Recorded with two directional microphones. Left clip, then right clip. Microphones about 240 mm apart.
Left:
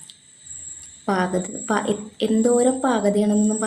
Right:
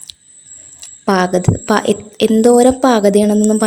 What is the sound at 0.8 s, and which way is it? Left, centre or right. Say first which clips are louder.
Speech: right 9 dB; right.